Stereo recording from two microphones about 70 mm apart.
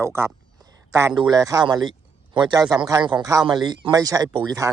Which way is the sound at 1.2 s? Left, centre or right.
Right.